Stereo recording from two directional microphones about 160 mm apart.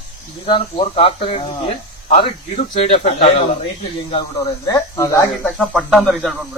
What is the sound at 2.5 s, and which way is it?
Speech, 45° left (ahead or behind).